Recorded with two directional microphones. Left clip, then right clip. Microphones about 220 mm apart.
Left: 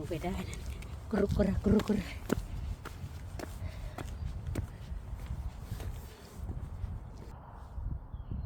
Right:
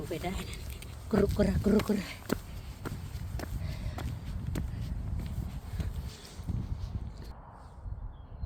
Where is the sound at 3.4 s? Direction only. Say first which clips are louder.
Right 2 dB; 15° right (ahead or behind).